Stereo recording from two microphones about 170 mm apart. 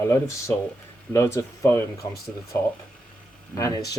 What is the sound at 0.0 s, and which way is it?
Speech, 15° left (ahead or behind).